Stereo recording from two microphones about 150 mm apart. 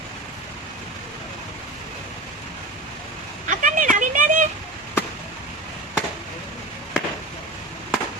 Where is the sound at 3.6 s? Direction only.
60° right (ahead or behind).